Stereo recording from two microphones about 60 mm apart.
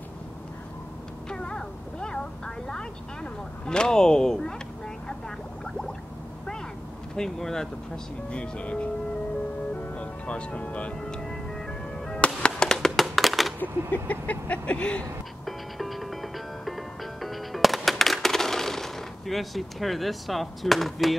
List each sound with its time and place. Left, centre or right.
1.3 s a sound: centre
3.6 s speech: centre
7.2 s speech: centre
9.9 s speech: centre
11.0 s music: centre
12.4 s a sound: centre
13.6 s vehicle: left
15.4 s music: centre